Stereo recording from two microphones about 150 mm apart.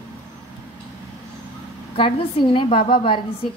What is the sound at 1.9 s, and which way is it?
A woman's voice, 35° left (ahead or behind).